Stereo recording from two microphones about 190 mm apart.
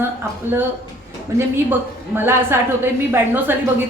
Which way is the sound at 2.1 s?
10° right (ahead or behind).